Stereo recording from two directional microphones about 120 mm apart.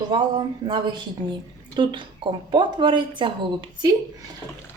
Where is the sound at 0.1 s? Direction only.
40° right (ahead or behind).